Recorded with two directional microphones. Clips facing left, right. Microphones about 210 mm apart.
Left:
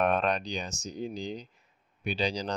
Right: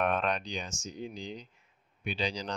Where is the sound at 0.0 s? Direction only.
40° left (ahead or behind).